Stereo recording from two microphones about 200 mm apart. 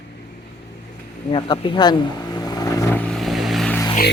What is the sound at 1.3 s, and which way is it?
Speech, 25° left (ahead or behind).